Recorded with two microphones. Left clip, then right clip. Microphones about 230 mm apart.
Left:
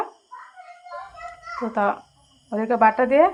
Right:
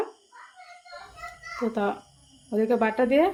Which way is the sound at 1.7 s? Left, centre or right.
Centre.